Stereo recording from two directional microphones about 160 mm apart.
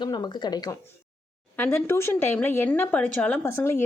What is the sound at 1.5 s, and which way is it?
Speech, 15° left (ahead or behind).